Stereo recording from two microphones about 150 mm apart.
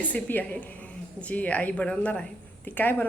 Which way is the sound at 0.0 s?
10° left (ahead or behind).